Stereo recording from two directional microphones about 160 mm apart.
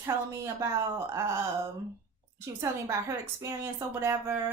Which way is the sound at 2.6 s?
20° right (ahead or behind).